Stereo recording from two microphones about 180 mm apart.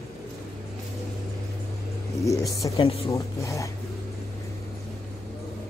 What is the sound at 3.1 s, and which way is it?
Speech, 15° left (ahead or behind).